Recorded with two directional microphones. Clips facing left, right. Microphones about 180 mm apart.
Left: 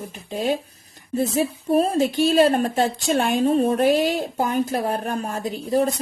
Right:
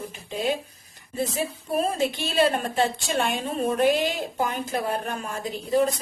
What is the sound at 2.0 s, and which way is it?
A woman's voice, 40° left (ahead or behind).